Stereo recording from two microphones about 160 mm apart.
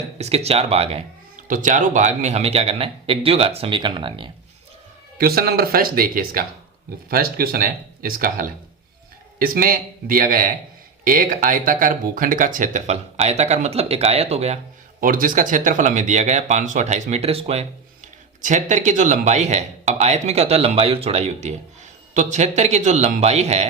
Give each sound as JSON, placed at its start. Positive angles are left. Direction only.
{"t": 0.2, "sound": "speech", "side_deg": -40}
{"t": 1.5, "sound": "speech", "side_deg": -55}
{"t": 5.1, "sound": "speech", "side_deg": -70}
{"t": 15.0, "sound": "speech", "side_deg": -60}